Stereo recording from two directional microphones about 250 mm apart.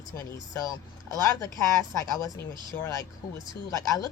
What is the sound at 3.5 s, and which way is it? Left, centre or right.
Speech, centre.